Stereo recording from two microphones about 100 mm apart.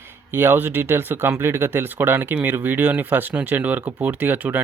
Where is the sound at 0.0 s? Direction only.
25° right (ahead or behind).